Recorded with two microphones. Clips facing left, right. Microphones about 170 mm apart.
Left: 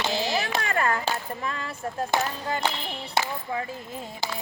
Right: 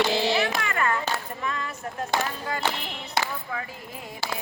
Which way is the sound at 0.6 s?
35° left (ahead or behind).